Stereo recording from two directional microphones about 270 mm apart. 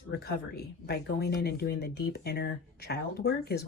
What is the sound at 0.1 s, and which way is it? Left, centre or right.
Speech, left.